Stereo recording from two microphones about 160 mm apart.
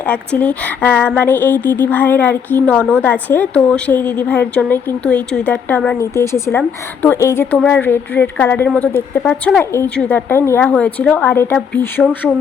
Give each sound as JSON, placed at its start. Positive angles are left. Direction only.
{"t": 0.0, "sound": "a woman's voice", "side_deg": 10}